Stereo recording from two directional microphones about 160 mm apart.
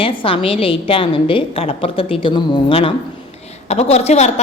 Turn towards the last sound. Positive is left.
turn(degrees=40)  # may be behind; listen again after turning